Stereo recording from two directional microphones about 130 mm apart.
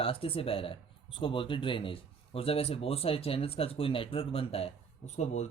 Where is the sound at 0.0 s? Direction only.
45° left (ahead or behind).